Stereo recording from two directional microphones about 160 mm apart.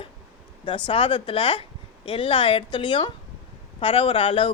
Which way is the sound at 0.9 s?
35° left (ahead or behind).